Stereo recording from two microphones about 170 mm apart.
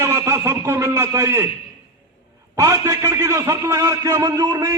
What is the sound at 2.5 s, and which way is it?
A man's voice, 15° right (ahead or behind).